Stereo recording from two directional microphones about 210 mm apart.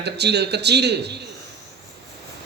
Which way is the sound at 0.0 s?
55° right (ahead or behind).